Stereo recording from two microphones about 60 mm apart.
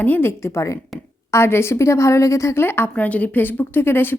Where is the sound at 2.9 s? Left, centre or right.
Left.